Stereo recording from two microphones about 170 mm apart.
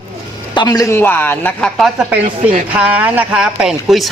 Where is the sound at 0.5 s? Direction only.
25° left (ahead or behind).